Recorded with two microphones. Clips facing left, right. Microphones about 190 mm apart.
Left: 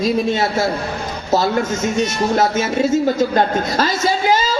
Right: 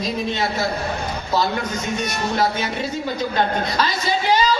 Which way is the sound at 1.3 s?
45° left (ahead or behind).